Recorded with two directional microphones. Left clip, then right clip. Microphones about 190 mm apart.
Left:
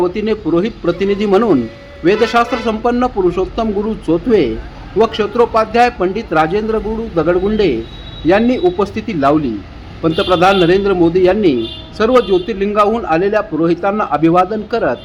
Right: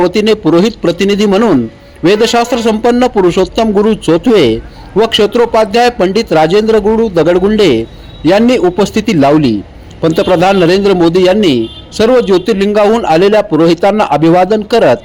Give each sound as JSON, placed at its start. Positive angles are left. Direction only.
{"t": 0.0, "sound": "a man's voice", "side_deg": -30}